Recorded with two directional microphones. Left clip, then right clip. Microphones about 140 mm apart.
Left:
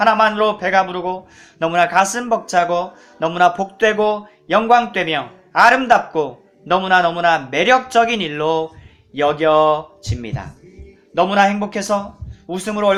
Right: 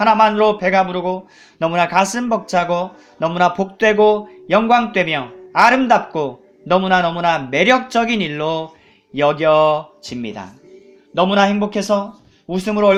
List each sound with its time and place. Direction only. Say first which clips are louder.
0.0 s speech: right 1 dB; 35° right (ahead or behind)